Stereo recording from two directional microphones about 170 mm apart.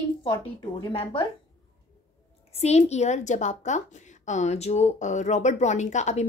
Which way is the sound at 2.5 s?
40° left (ahead or behind).